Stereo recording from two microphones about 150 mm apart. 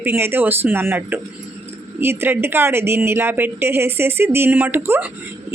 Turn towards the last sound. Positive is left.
turn(degrees=-15)  # may be behind; listen again after turning